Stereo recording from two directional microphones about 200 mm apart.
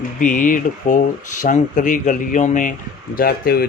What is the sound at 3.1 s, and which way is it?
Speech, 50° left (ahead or behind).